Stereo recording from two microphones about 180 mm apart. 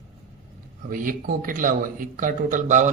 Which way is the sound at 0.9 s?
50° right (ahead or behind).